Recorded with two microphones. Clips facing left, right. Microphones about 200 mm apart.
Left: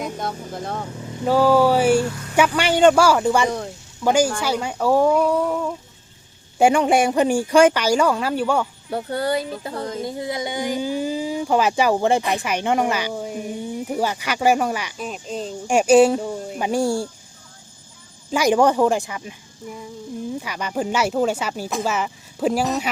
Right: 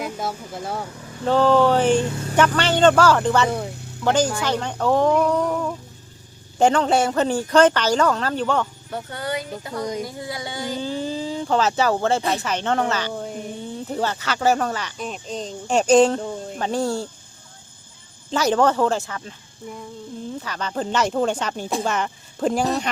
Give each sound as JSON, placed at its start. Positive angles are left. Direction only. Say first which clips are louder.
{"t": 0.0, "sound": "speech", "louder": "left 1 dB", "side_deg": -5}
{"t": 0.9, "sound": "vehicle", "louder": "left 5 dB", "side_deg": 20}
{"t": 1.2, "sound": "speech", "louder": "left 1 dB", "side_deg": 10}
{"t": 2.0, "sound": "speech", "louder": "right 2 dB", "side_deg": -25}
{"t": 2.3, "sound": "speech", "louder": "left 1 dB", "side_deg": 10}
{"t": 8.9, "sound": "speech", "louder": "left 6 dB", "side_deg": 35}
{"t": 18.3, "sound": "speech", "louder": "left 2 dB", "side_deg": 10}